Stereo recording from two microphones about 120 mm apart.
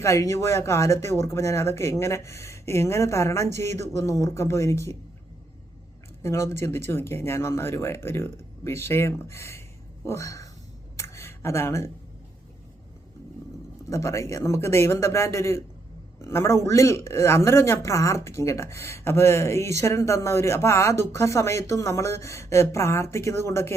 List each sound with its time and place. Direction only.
0.0 s speech: 25° left (ahead or behind)
6.2 s speech: 25° left (ahead or behind)
10.1 s a sound: 25° left (ahead or behind)
13.9 s speech: 25° left (ahead or behind)